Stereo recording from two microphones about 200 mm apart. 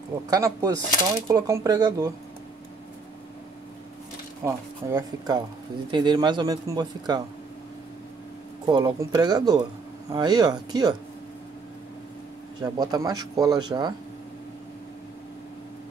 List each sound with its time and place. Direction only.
0.3 s speech: 15° right (ahead or behind)
4.5 s speech: 20° right (ahead or behind)
8.6 s speech: 20° right (ahead or behind)
12.6 s speech: 20° right (ahead or behind)